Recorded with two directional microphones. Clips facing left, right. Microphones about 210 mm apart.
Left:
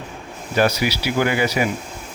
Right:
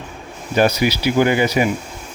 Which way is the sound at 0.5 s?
20° right (ahead or behind).